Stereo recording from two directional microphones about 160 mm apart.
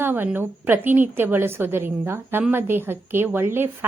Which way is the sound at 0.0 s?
10° right (ahead or behind).